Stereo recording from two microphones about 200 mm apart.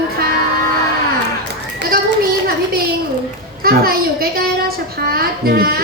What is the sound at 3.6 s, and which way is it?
A woman's voice, 50° right (ahead or behind).